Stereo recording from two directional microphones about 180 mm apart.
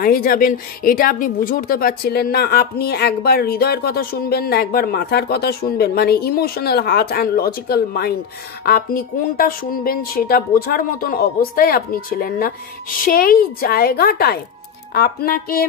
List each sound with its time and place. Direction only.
0.0 s speech: 55° left (ahead or behind)